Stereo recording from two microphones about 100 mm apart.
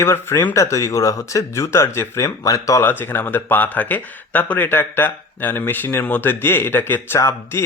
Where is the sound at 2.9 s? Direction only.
20° left (ahead or behind).